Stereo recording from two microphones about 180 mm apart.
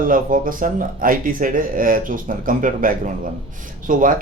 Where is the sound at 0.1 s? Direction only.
50° right (ahead or behind).